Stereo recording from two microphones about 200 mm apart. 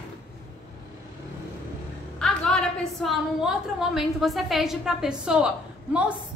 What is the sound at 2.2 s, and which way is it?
A woman's voice, 5° left (ahead or behind).